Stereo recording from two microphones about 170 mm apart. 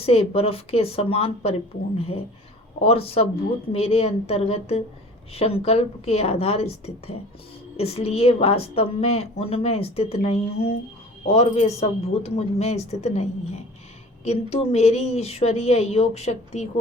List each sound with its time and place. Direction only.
0.0 s a woman's voice: 35° left (ahead or behind)
14.3 s a woman's voice: 40° left (ahead or behind)